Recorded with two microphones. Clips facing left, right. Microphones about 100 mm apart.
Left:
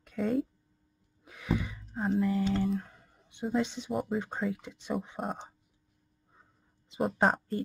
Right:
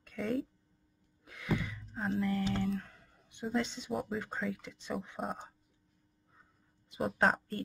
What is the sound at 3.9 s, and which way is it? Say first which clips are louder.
Speech: left 4 dB; 5° left (ahead or behind).